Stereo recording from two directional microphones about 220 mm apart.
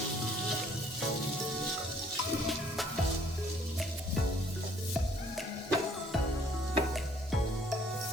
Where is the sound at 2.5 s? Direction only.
Centre (ahead or behind).